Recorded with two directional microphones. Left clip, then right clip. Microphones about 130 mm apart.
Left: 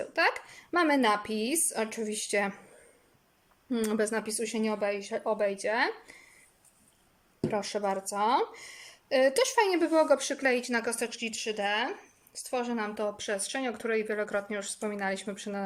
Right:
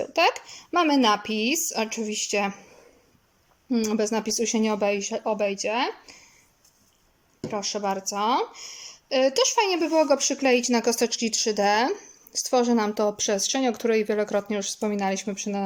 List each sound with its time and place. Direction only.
0.0 s speech: 15° right (ahead or behind); by 2.6 s centre (ahead or behind)
3.7 s speech: 5° right (ahead or behind)
4.1 s speech: 20° right (ahead or behind); by 6.2 s 5° right (ahead or behind)
7.4 s speech: centre (ahead or behind)
10.1 s a woman's voice: 15° right (ahead or behind)